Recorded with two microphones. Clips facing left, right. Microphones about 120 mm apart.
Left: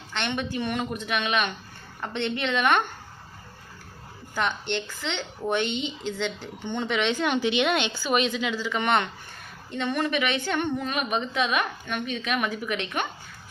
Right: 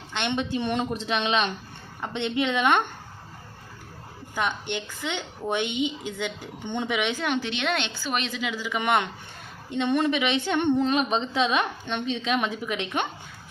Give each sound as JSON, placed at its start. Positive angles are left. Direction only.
{"t": 0.1, "sound": "a woman's voice", "side_deg": -20}
{"t": 2.0, "sound": "a woman's voice", "side_deg": -15}
{"t": 4.4, "sound": "a woman's voice", "side_deg": -15}